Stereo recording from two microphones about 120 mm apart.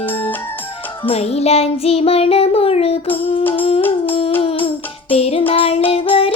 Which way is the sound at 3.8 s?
15° left (ahead or behind).